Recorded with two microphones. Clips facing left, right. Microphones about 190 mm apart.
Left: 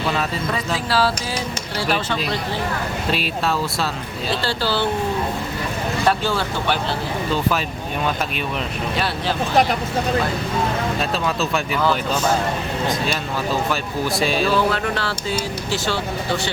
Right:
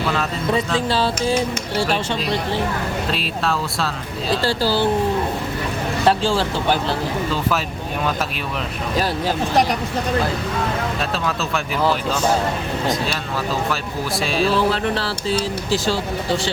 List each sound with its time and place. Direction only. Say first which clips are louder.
0.9 s a sound: even; 20° right (ahead or behind)
3.1 s speech: left 4 dB; centre (ahead or behind)
4.4 s speech: right 3 dB; 35° right (ahead or behind)
6.1 s speech: right 3 dB; 30° right (ahead or behind)
11.1 s speech: left 1 dB; centre (ahead or behind)
14.2 s speech: even; centre (ahead or behind)
14.7 s speech: right 2 dB; 30° right (ahead or behind)